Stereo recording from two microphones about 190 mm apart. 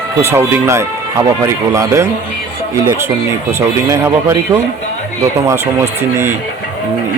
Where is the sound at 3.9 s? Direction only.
15° right (ahead or behind).